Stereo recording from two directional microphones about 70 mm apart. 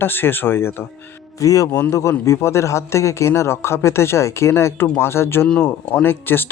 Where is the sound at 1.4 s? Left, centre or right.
Left.